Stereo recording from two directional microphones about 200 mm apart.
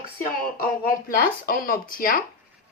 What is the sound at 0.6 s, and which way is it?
Speech, 45° left (ahead or behind).